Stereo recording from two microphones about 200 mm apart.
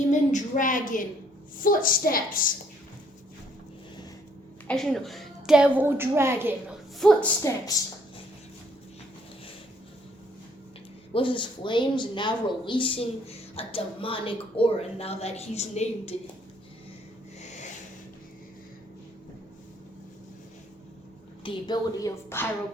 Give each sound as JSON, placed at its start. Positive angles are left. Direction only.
{"t": 0.1, "sound": "a woman's voice", "side_deg": 40}
{"t": 4.7, "sound": "a woman's voice", "side_deg": 0}
{"t": 7.0, "sound": "a woman's voice", "side_deg": 0}
{"t": 7.5, "sound": "a woman's voice", "side_deg": 15}
{"t": 11.1, "sound": "speech", "side_deg": 25}
{"t": 21.4, "sound": "a woman's voice", "side_deg": 20}